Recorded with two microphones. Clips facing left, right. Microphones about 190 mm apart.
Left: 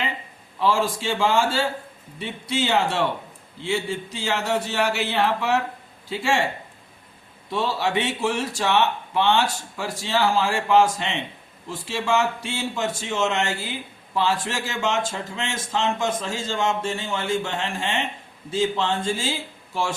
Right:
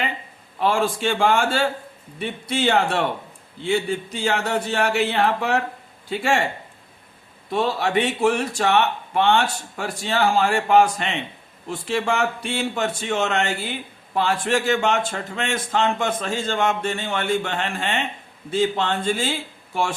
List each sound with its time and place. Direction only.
0.6 s speech: 55° right (ahead or behind)
7.5 s speech: 55° right (ahead or behind)